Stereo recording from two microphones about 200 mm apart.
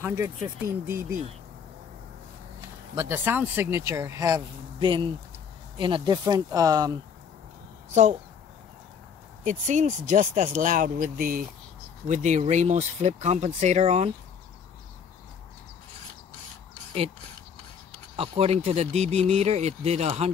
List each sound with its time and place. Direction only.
0.0 s speech: 10° right (ahead or behind)
2.9 s speech: 15° right (ahead or behind)
7.9 s speech: 35° right (ahead or behind)
9.4 s speech: 40° right (ahead or behind)
18.1 s speech: 30° right (ahead or behind)